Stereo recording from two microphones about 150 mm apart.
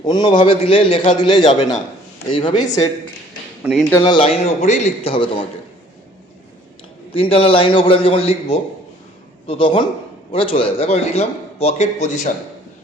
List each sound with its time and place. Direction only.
0.0 s a man's voice: 30° left (ahead or behind)
3.6 s a man's voice: 5° right (ahead or behind)
4.0 s a man's voice: 30° left (ahead or behind)
4.3 s a man's voice: 50° left (ahead or behind)
7.1 s a man's voice: 40° left (ahead or behind)